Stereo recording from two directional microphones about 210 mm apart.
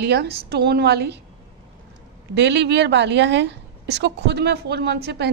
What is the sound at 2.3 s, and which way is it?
A woman's voice, 55° right (ahead or behind).